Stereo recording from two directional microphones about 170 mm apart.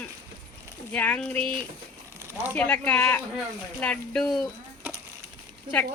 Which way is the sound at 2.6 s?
10° left (ahead or behind).